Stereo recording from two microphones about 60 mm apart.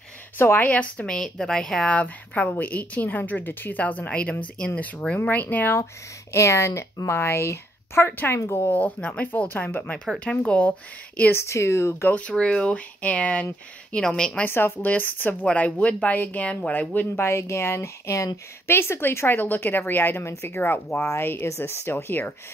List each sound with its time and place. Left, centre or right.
0.4 s a woman's voice: left
1.0 s a woman's voice: centre
2.0 s a woman's voice: left
6.3 s a woman's voice: left
8.7 s a woman's voice: left
10.1 s a woman's voice: centre
11.3 s a woman's voice: left
12.1 s a woman's voice: centre
13.9 s a woman's voice: centre
14.5 s a woman's voice: left
17.1 s a woman's voice: left
18.7 s speech: left